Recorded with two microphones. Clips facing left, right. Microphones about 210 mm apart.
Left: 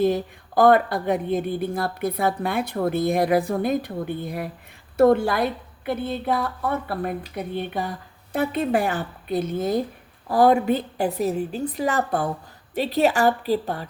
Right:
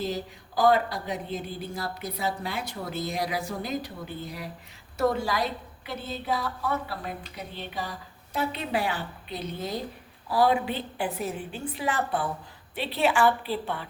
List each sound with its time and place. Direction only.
0.0 s a woman's voice: 55° left (ahead or behind)